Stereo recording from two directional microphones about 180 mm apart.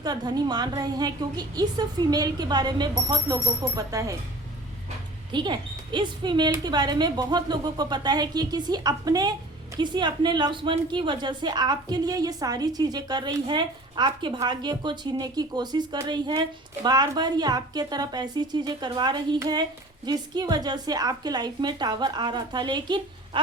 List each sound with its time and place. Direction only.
0.0 s a woman's voice: 20° right (ahead or behind)
5.3 s a woman's voice: 25° right (ahead or behind)